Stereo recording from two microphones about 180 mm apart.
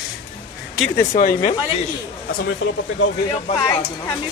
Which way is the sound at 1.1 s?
50° left (ahead or behind).